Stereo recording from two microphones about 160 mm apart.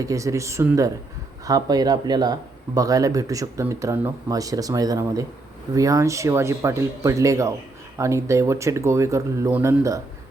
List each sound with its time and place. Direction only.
0.0 s speech: 20° right (ahead or behind)